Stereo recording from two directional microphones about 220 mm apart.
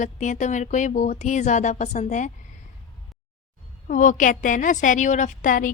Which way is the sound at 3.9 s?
35° left (ahead or behind).